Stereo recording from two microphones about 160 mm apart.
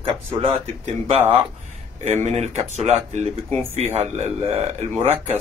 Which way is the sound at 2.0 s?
45° right (ahead or behind).